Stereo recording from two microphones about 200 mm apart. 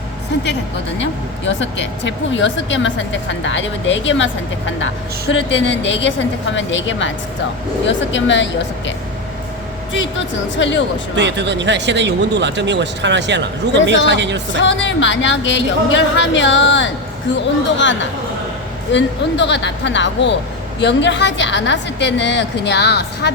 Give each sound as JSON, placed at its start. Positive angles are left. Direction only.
{"t": 1.5, "sound": "a woman's voice", "side_deg": 65}
{"t": 9.9, "sound": "speech", "side_deg": 65}
{"t": 11.2, "sound": "speech", "side_deg": -60}
{"t": 14.6, "sound": "speech", "side_deg": 65}
{"t": 18.9, "sound": "a woman's voice", "side_deg": 65}